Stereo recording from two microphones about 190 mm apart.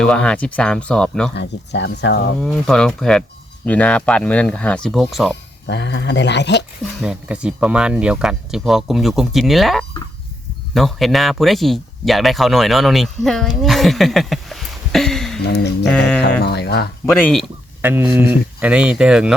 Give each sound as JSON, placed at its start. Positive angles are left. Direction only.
{"t": 0.0, "sound": "speech", "side_deg": 5}
{"t": 1.4, "sound": "speech", "side_deg": 65}
{"t": 2.4, "sound": "speech", "side_deg": 0}
{"t": 5.6, "sound": "speech", "side_deg": 65}
{"t": 7.0, "sound": "speech", "side_deg": -5}
{"t": 15.4, "sound": "speech", "side_deg": 65}
{"t": 15.8, "sound": "speech", "side_deg": 5}
{"t": 16.4, "sound": "speech", "side_deg": 60}
{"t": 17.1, "sound": "speech", "side_deg": 10}
{"t": 17.8, "sound": "speech", "side_deg": -10}